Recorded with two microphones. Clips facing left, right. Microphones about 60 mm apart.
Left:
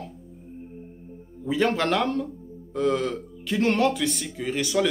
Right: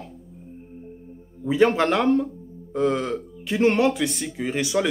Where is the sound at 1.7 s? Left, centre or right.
Centre.